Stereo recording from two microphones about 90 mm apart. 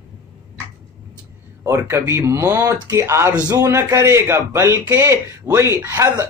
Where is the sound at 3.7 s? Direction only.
30° right (ahead or behind).